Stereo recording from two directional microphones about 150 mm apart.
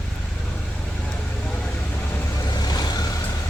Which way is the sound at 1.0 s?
10° left (ahead or behind).